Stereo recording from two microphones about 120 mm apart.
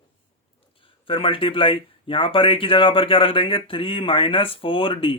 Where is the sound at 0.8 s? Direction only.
45° left (ahead or behind).